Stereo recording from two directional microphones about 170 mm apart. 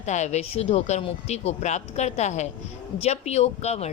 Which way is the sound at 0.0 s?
45° left (ahead or behind).